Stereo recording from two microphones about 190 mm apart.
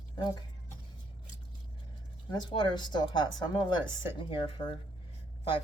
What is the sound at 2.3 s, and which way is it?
Speech, 25° left (ahead or behind).